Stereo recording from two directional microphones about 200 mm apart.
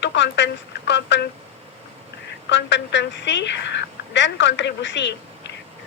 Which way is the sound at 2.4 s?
65° left (ahead or behind).